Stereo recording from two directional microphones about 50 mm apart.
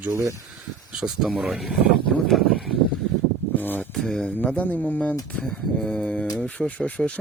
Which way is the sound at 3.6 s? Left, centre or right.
Left.